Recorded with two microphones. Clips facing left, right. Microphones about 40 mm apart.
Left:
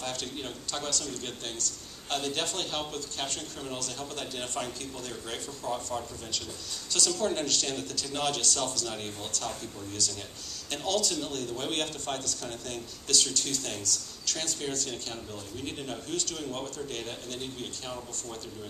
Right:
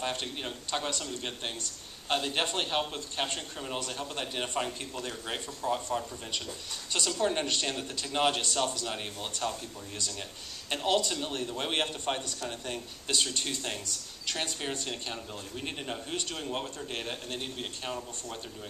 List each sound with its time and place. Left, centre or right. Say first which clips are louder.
0.0 s a man's voice: right 2 dB; right